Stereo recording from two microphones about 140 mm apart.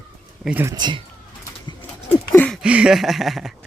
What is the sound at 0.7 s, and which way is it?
Speech, 30° right (ahead or behind).